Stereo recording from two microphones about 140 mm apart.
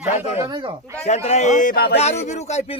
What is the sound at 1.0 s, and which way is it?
Speech, 50° left (ahead or behind).